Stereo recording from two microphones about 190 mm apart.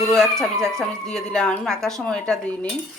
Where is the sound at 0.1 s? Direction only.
Centre (ahead or behind).